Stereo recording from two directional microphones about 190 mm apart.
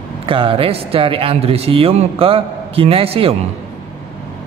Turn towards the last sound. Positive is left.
turn(degrees=-30)  # may be behind; listen again after turning